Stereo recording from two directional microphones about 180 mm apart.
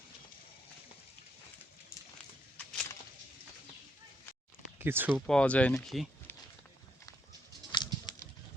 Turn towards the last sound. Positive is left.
turn(degrees=25)  # may be behind; listen again after turning